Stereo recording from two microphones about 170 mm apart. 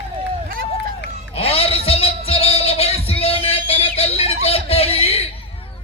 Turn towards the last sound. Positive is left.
turn(degrees=35)  # may be behind; listen again after turning